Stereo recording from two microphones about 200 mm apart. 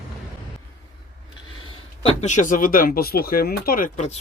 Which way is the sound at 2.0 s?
30° left (ahead or behind).